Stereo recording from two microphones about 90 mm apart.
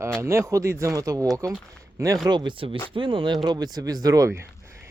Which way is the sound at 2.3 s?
60° right (ahead or behind).